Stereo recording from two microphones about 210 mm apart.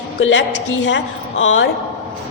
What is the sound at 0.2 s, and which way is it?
A woman's voice, 65° left (ahead or behind).